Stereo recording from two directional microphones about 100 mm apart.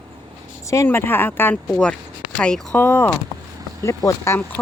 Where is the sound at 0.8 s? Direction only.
20° left (ahead or behind).